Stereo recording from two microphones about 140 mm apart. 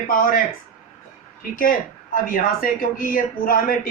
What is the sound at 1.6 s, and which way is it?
Speech, 85° left.